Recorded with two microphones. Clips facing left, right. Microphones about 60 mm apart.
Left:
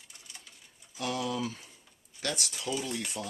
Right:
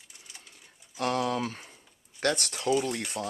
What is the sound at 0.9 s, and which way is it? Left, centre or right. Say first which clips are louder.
Speech: right 5 dB; right.